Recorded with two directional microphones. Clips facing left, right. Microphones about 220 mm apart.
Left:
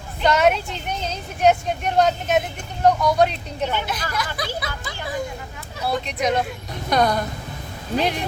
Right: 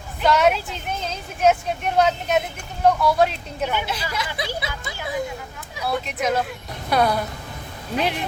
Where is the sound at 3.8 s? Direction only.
25° right (ahead or behind).